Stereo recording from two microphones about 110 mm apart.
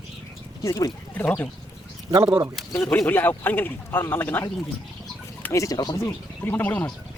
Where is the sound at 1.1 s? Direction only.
10° left (ahead or behind).